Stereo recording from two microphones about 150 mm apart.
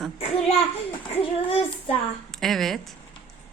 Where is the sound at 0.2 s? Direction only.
40° left (ahead or behind).